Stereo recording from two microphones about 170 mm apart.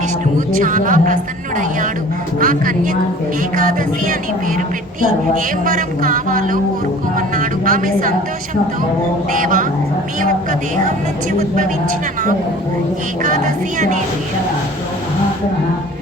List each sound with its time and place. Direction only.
0.6 s a woman's voice: 50° right (ahead or behind)
3.5 s music: 55° right (ahead or behind)
5.6 s a woman's voice: 55° right (ahead or behind)
9.3 s a woman's voice: 50° right (ahead or behind)
10.8 s a woman's voice: 45° right (ahead or behind)
13.2 s a woman's voice: 45° right (ahead or behind)